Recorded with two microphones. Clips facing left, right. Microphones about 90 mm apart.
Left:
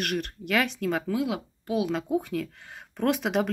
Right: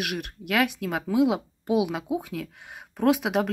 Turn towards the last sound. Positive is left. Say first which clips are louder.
# right 3 dB
turn(degrees=-5)  # may be behind; listen again after turning